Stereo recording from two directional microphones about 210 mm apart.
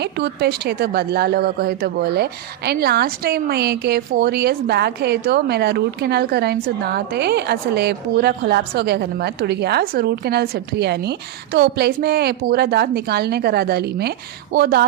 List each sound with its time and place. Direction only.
0.0 s a woman's voice: 50° right (ahead or behind)